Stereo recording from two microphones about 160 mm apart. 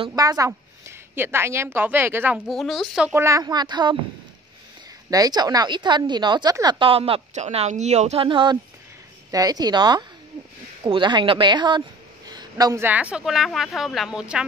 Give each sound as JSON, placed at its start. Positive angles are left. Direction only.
{"t": 0.1, "sound": "a woman's voice", "side_deg": -20}
{"t": 2.4, "sound": "speech", "side_deg": 0}
{"t": 3.3, "sound": "a woman's voice", "side_deg": -20}
{"t": 5.1, "sound": "a woman's voice", "side_deg": -25}